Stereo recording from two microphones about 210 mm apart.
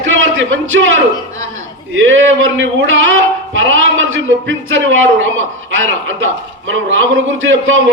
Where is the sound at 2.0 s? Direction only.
65° right (ahead or behind).